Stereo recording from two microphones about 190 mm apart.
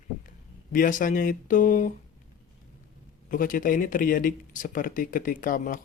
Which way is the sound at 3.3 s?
45° left (ahead or behind).